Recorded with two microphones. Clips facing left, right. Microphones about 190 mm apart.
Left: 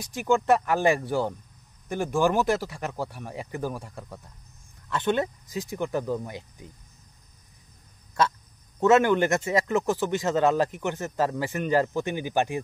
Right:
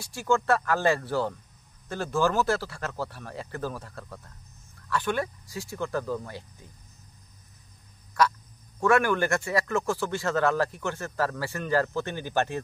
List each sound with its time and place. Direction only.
0.0 s speech: 15° left (ahead or behind)
8.2 s quack: 25° left (ahead or behind)
8.7 s speech: 20° left (ahead or behind)